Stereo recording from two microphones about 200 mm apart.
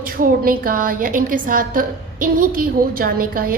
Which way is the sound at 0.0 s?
45° right (ahead or behind).